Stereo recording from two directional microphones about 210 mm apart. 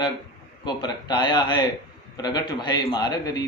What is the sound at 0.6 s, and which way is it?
A man's voice, 20° left (ahead or behind).